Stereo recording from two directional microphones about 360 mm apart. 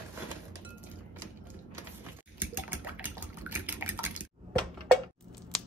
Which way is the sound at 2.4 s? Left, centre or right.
Centre.